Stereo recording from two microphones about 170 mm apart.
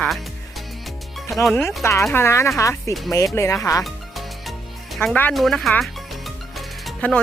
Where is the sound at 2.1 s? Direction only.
15° left (ahead or behind).